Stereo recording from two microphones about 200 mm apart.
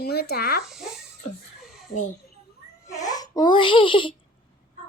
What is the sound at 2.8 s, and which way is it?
Music, 15° left (ahead or behind).